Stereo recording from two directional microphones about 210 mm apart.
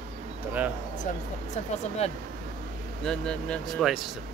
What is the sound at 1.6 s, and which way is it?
Speech, 30° left (ahead or behind).